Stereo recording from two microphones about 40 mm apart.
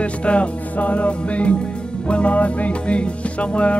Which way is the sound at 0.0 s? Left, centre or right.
Left.